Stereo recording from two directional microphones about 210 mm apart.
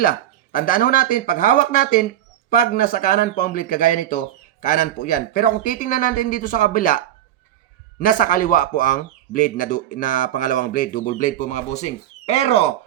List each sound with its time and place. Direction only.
0.0 s speech: 40° left (ahead or behind)